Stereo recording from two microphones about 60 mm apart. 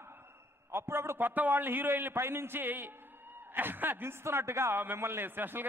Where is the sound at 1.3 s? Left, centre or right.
Right.